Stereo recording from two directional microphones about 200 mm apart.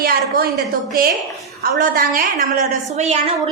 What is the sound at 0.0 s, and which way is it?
Speech, 50° right (ahead or behind).